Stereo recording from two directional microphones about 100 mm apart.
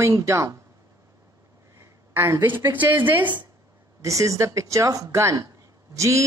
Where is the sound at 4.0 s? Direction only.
30° right (ahead or behind).